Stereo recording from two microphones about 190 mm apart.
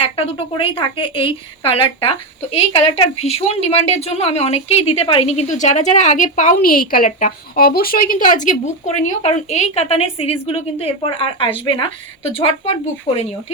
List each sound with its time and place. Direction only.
0.0 s a woman's voice: 30° left (ahead or behind)